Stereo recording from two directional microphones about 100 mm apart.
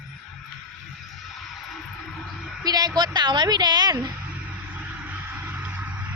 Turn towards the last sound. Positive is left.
turn(degrees=-15)  # may be behind; listen again after turning